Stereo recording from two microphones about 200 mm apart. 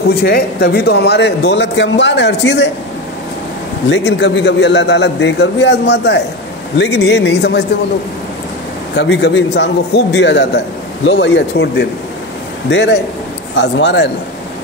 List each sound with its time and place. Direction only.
0.2 s a man's voice: 55° left (ahead or behind)
3.9 s a man's voice: 60° left (ahead or behind)
8.9 s a man's voice: 60° left (ahead or behind)